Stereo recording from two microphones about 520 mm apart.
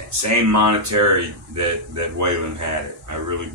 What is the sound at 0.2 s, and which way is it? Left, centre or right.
Speech, right.